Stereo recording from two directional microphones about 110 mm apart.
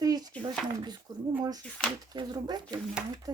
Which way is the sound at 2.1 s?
40° right (ahead or behind).